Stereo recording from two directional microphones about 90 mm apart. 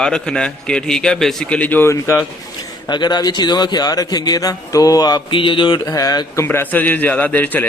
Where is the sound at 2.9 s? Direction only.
55° left (ahead or behind).